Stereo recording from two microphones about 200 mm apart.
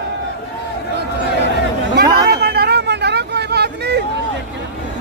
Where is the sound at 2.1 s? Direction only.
50° right (ahead or behind).